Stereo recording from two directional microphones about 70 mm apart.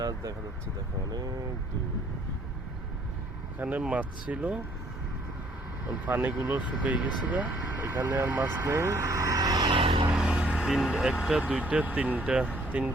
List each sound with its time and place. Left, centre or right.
0.0 s speech: right
3.6 s speech: right
6.1 s speech: right
8.6 s speech: right
10.2 s vehicle: centre
11.3 s speech: centre